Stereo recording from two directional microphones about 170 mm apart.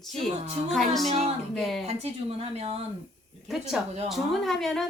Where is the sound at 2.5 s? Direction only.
40° right (ahead or behind).